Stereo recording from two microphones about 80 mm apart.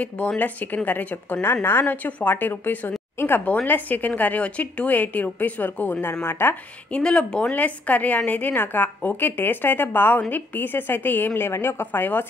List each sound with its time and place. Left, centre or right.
0.0 s a woman's voice: centre
6.9 s a woman's voice: centre